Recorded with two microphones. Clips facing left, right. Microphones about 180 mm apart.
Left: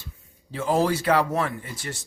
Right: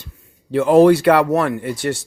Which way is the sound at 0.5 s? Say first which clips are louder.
Right 12 dB; 65° right (ahead or behind).